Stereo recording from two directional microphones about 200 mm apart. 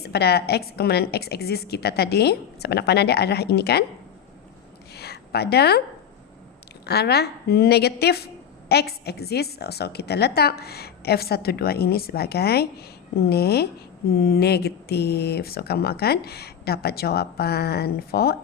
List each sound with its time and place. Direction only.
0.0 s speech: 55° left (ahead or behind)
4.9 s a sound: 55° left (ahead or behind)
6.8 s speech: 55° left (ahead or behind)